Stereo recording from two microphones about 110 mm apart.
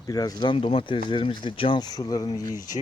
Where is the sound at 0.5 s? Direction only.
55° left (ahead or behind).